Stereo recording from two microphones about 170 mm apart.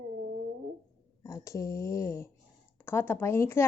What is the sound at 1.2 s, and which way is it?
A woman's voice, 20° left (ahead or behind).